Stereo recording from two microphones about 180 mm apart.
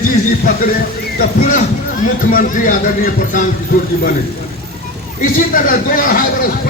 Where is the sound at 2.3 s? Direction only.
50° left (ahead or behind).